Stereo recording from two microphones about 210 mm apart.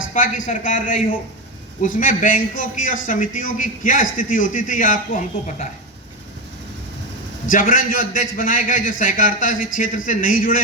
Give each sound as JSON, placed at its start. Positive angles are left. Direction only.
{"t": 0.1, "sound": "a man's voice", "side_deg": 35}
{"t": 7.5, "sound": "a man's voice", "side_deg": 40}